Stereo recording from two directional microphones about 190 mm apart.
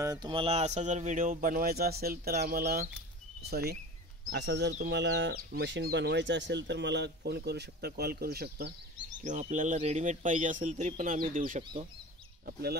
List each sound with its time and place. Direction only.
0.0 s speech: 20° right (ahead or behind); by 9.2 s 55° right (ahead or behind)
9.2 s speech: 40° right (ahead or behind)